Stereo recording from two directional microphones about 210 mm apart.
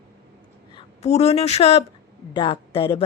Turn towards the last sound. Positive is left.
turn(degrees=25)  # may be behind; listen again after turning